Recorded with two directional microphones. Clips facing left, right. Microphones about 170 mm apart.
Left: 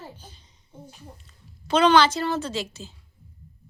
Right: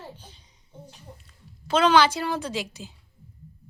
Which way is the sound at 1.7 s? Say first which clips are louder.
Left 1 dB; 5° right (ahead or behind).